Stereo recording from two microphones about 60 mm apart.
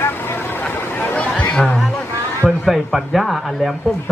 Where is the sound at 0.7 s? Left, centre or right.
Left.